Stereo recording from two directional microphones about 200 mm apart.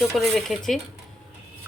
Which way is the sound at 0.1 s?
Centre (ahead or behind).